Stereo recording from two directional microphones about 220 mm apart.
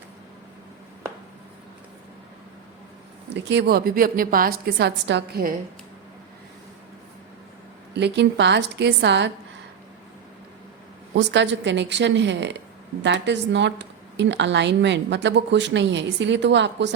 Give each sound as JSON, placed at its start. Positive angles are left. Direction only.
{"t": 3.3, "sound": "a woman's voice", "side_deg": -50}
{"t": 7.9, "sound": "a woman's voice", "side_deg": -50}
{"t": 11.1, "sound": "a woman's voice", "side_deg": -50}